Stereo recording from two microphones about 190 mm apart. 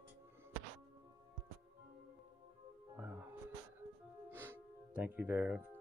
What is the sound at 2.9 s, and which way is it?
Music, 10° right (ahead or behind).